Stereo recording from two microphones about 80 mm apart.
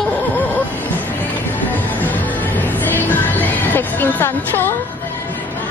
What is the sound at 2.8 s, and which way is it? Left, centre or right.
Music, left.